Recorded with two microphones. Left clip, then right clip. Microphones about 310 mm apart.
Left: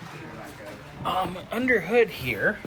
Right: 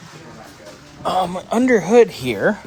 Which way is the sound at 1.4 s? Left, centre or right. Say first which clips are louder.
Right 8 dB; centre.